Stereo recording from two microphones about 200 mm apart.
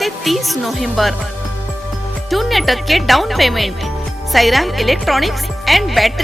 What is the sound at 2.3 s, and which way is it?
A woman's voice, centre (ahead or behind).